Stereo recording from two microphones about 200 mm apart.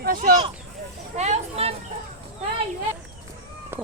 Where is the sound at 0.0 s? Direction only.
45° right (ahead or behind).